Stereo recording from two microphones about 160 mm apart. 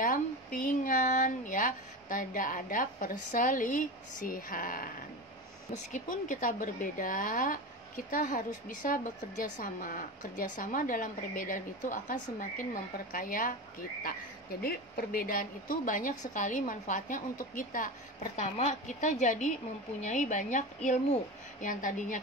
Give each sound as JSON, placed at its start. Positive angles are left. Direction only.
{"t": 0.0, "sound": "a woman's voice", "side_deg": 60}
{"t": 14.6, "sound": "a woman's voice", "side_deg": 70}